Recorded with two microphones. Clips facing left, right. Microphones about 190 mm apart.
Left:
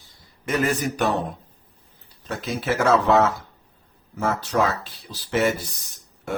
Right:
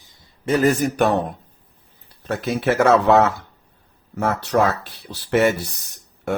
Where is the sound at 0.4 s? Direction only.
35° right (ahead or behind); by 1.2 s 55° right (ahead or behind).